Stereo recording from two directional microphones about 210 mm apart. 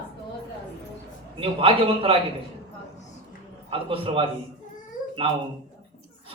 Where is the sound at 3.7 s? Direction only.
25° right (ahead or behind).